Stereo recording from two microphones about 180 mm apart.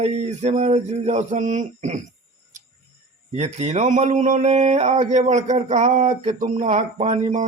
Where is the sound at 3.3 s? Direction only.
40° right (ahead or behind).